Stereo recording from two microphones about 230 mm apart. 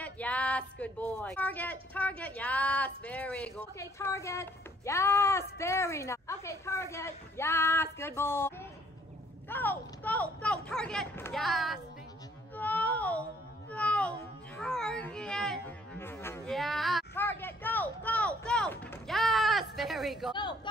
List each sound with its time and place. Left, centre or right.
0.0 s speech: centre
13.7 s a sound: centre
14.6 s speech: centre
20.3 s a woman's voice: centre